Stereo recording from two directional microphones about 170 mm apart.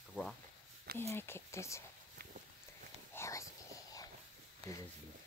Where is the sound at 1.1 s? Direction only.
15° left (ahead or behind).